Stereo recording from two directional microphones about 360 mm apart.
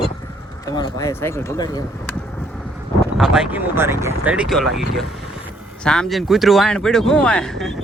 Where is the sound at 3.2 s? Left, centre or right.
Centre.